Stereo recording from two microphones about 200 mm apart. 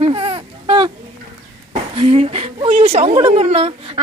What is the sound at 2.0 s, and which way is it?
A child's voice, 30° right (ahead or behind).